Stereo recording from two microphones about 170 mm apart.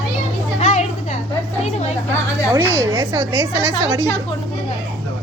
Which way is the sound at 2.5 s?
15° right (ahead or behind).